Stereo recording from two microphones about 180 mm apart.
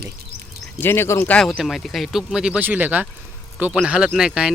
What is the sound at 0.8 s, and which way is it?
Speech, 15° left (ahead or behind).